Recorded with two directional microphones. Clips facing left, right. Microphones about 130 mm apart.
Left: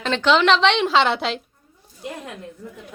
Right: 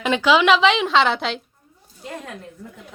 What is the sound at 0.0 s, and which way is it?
A woman's voice, 10° right (ahead or behind).